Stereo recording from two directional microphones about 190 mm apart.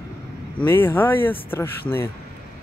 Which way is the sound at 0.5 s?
10° left (ahead or behind).